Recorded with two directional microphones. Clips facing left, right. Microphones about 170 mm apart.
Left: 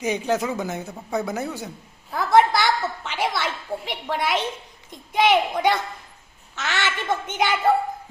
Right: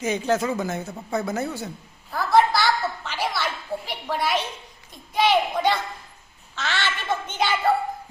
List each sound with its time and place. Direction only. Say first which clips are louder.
0.0 s speech: even; 15° left (ahead or behind)
2.1 s a sound: left 2 dB; 20° left (ahead or behind)
4.9 s a child's voice: left 2 dB; 20° left (ahead or behind)